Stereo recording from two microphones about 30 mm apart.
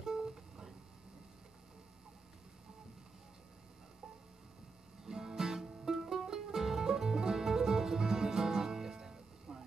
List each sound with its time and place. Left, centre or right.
0.0 s music: centre
5.0 s music: centre